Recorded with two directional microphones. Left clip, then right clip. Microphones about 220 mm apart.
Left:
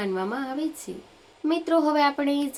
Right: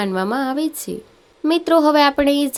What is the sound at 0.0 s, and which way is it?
Speech, 45° right (ahead or behind).